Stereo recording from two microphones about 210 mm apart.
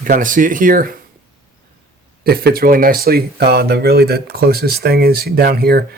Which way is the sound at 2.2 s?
45° right (ahead or behind).